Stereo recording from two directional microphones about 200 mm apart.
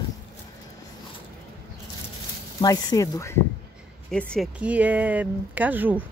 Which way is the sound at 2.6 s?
20° left (ahead or behind).